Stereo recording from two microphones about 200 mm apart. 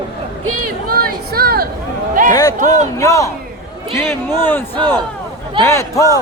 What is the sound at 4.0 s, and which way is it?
A man's voice, 10° left (ahead or behind).